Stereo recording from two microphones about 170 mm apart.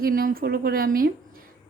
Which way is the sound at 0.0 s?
55° right (ahead or behind).